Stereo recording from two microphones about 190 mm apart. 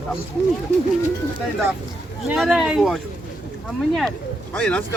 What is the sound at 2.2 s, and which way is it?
Speech, centre (ahead or behind).